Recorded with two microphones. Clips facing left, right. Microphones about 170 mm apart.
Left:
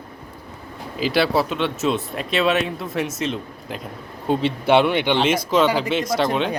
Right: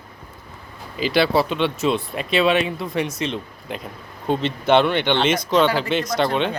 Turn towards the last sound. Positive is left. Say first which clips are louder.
# even
turn(degrees=0)  # may be behind; listen again after turning